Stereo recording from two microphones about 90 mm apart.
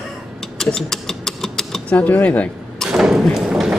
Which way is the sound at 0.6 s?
5° left (ahead or behind).